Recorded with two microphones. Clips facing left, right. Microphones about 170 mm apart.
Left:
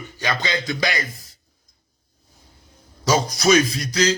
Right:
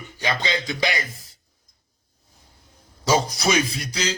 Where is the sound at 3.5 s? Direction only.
10° right (ahead or behind).